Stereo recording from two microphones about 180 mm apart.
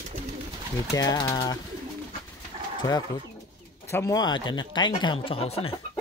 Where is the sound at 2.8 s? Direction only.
20° left (ahead or behind).